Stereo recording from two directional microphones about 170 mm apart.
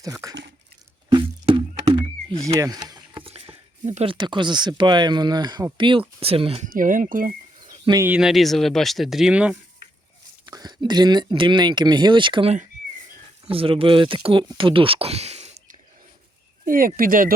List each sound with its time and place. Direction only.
0.0 s speech: 20° right (ahead or behind)
6.7 s speech: 50° right (ahead or behind)
7.6 s a sound: 30° right (ahead or behind)
7.9 s speech: 10° right (ahead or behind)
10.4 s speech: 25° right (ahead or behind)
16.6 s speech: 55° right (ahead or behind)